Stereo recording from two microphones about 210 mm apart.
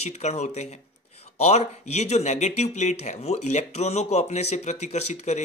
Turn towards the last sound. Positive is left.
turn(degrees=35)  # may be behind; listen again after turning